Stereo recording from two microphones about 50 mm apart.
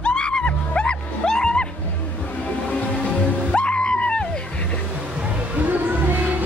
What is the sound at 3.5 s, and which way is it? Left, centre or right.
Music, left.